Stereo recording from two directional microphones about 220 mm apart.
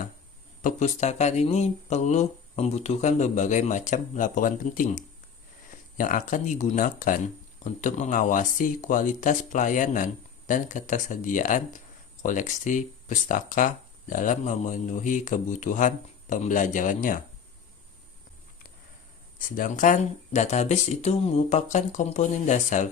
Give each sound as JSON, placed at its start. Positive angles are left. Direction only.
{"t": 0.6, "sound": "speech", "side_deg": 30}
{"t": 19.4, "sound": "speech", "side_deg": 40}